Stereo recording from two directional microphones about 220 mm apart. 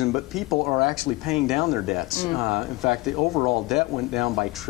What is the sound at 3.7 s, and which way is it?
Speech, centre (ahead or behind).